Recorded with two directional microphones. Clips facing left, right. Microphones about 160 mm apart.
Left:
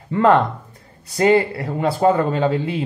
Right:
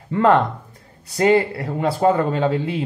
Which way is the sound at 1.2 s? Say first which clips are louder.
Left 1 dB; 20° left (ahead or behind).